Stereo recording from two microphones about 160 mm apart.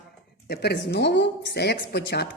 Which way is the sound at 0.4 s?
90° left.